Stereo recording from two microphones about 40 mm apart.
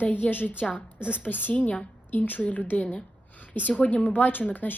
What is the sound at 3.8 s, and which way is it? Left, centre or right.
Speech, left.